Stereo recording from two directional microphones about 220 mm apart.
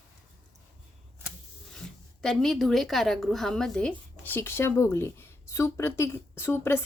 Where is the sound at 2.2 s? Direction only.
Centre (ahead or behind).